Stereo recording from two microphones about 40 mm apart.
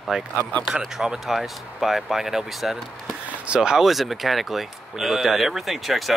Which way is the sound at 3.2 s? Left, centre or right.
Right.